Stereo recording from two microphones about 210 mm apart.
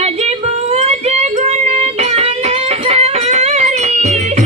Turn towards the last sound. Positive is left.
turn(degrees=-35)  # may be behind; listen again after turning